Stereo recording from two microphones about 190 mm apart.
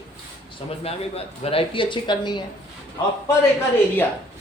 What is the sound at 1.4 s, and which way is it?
Speech, 30° left (ahead or behind).